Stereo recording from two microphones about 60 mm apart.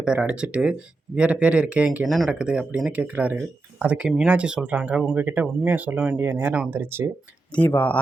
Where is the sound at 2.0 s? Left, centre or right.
Centre.